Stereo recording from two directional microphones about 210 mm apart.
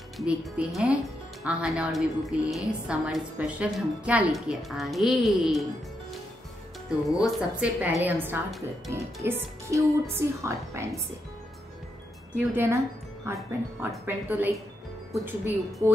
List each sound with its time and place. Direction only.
0.2 s speech: centre (ahead or behind)
7.2 s speech: 5° right (ahead or behind)
8.9 s speech: 15° right (ahead or behind)
12.4 s speech: 10° right (ahead or behind)